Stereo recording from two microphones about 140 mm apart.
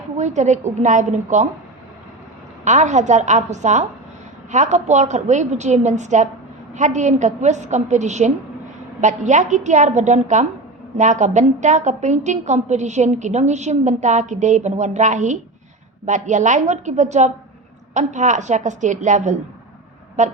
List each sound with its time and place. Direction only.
0.2 s a woman's voice: 55° right (ahead or behind)
2.6 s a woman's voice: 55° right (ahead or behind)